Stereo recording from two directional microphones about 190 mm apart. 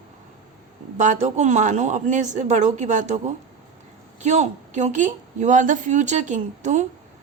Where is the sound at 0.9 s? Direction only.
40° right (ahead or behind).